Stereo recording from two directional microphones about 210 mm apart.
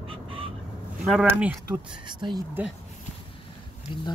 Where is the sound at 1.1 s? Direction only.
5° right (ahead or behind).